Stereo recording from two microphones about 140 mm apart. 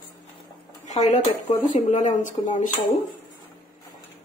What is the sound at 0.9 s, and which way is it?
Speech, 55° left (ahead or behind).